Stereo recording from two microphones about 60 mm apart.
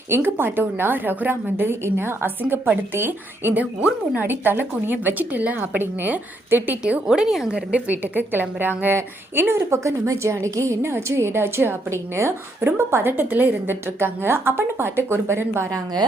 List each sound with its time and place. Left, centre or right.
0.1 s a woman's voice: right
7.1 s a woman's voice: centre
7.5 s a woman's voice: right